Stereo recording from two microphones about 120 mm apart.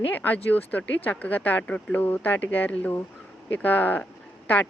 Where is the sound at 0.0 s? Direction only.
15° left (ahead or behind).